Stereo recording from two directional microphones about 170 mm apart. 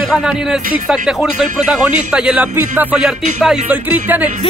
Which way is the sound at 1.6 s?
5° right (ahead or behind).